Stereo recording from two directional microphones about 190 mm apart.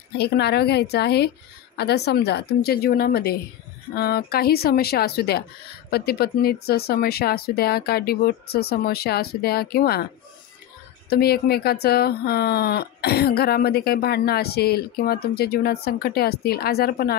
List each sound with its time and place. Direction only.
0.2 s speech: 60° left (ahead or behind)
11.1 s speech: 55° left (ahead or behind)